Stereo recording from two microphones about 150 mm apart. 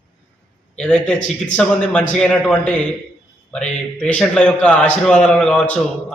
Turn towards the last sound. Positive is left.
turn(degrees=5)  # may be behind; listen again after turning